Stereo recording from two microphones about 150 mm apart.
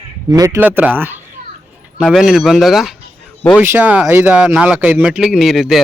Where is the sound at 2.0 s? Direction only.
Centre (ahead or behind).